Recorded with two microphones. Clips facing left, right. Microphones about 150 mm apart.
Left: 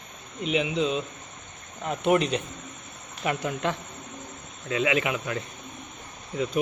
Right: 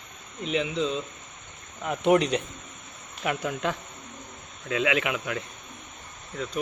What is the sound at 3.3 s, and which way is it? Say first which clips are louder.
A man's voice: left 1 dB; 5° right (ahead or behind).